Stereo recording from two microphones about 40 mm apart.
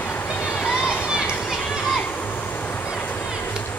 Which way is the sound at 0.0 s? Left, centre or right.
Left.